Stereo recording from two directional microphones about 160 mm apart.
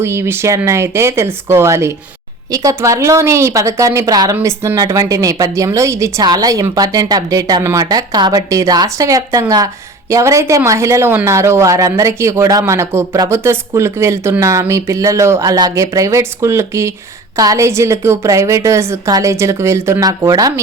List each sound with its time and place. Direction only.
0.0 s a woman's voice: 15° right (ahead or behind)